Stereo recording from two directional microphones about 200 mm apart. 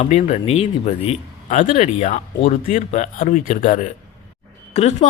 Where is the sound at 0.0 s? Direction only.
35° left (ahead or behind).